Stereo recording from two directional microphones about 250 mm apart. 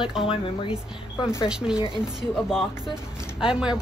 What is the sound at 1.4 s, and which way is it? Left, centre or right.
Speech, centre.